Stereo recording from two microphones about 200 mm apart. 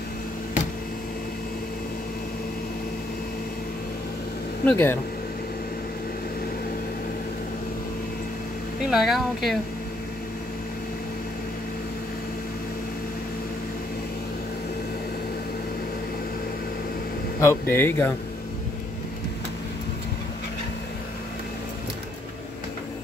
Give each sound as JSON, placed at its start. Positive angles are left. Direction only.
{"t": 4.6, "sound": "speech", "side_deg": 10}
{"t": 8.9, "sound": "speech", "side_deg": 0}
{"t": 17.4, "sound": "speech", "side_deg": 10}